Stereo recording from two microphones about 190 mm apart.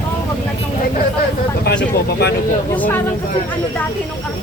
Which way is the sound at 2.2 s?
60° left (ahead or behind).